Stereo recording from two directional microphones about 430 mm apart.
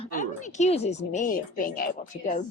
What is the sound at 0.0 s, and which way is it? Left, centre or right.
Speech, centre.